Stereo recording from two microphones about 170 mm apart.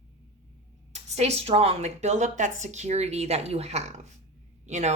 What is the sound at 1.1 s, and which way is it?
A woman's voice, 40° right (ahead or behind).